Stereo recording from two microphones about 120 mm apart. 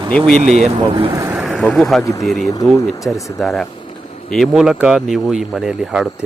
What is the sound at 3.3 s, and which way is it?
Speech, centre (ahead or behind).